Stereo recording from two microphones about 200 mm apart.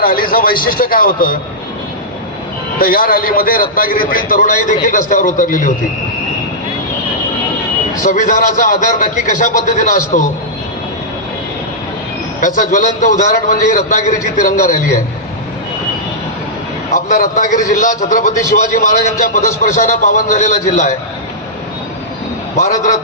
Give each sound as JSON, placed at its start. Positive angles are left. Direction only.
{"t": 0.0, "sound": "a man's voice", "side_deg": 45}
{"t": 2.7, "sound": "a man's voice", "side_deg": 45}
{"t": 8.0, "sound": "a man's voice", "side_deg": 40}
{"t": 12.4, "sound": "a man's voice", "side_deg": 40}
{"t": 16.9, "sound": "a man's voice", "side_deg": 40}
{"t": 22.5, "sound": "a man's voice", "side_deg": 35}